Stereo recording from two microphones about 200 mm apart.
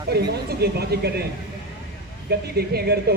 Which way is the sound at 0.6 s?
50° right (ahead or behind).